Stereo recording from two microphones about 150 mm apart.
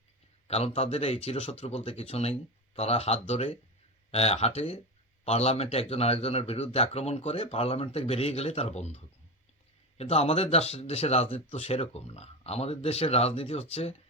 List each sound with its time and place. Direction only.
0.4 s speech: 45° left (ahead or behind)
10.0 s speech: 40° left (ahead or behind)